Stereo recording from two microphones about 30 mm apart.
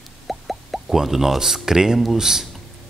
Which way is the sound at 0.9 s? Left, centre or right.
Centre.